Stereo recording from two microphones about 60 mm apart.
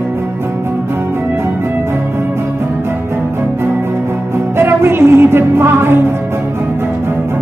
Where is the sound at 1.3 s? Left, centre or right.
Right.